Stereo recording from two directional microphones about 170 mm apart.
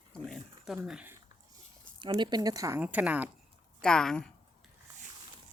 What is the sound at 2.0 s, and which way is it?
Speech, 25° right (ahead or behind).